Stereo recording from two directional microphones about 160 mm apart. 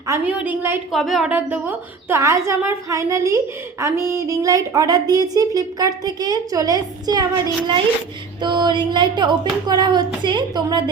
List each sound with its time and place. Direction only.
0.3 s a woman's voice: 10° right (ahead or behind)
0.9 s a woman's voice: centre (ahead or behind); by 7.3 s 25° right (ahead or behind)
8.4 s a woman's voice: 30° right (ahead or behind)